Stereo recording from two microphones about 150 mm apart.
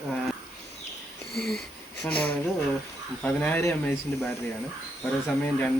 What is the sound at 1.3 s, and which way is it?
Speech, 5° left (ahead or behind).